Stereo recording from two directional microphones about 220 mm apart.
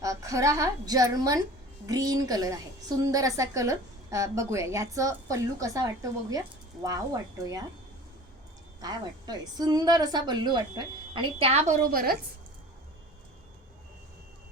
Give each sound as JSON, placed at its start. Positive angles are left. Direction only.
{"t": 0.0, "sound": "a woman's voice", "side_deg": -15}
{"t": 8.8, "sound": "a woman's voice", "side_deg": -15}